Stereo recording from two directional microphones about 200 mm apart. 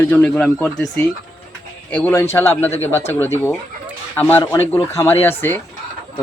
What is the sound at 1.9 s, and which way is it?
Speech, 10° left (ahead or behind).